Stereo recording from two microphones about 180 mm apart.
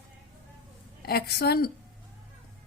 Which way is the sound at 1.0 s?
60° left (ahead or behind).